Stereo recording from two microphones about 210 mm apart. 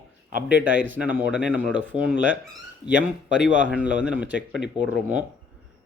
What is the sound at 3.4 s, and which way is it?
Speech, 5° right (ahead or behind).